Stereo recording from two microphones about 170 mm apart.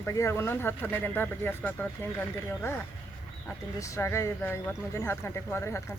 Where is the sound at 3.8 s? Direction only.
15° left (ahead or behind).